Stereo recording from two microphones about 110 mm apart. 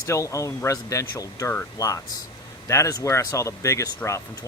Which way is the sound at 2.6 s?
30° left (ahead or behind).